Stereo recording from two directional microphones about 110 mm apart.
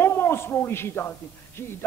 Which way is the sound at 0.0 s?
20° left (ahead or behind).